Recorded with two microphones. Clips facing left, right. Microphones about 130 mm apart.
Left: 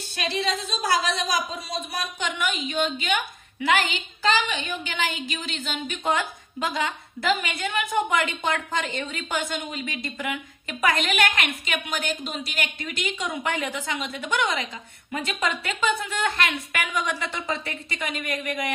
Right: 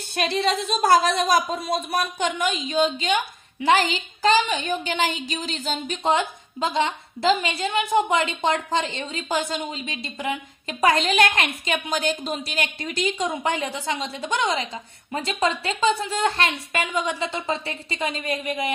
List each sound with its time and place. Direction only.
0.1 s a woman's voice: 50° right (ahead or behind); by 18.7 s 25° right (ahead or behind)